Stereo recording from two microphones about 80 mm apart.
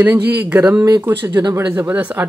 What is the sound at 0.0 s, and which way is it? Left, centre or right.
Speech, right.